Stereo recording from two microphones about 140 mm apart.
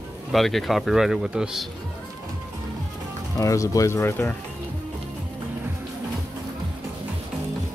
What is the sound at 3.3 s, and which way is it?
Speech, 25° left (ahead or behind).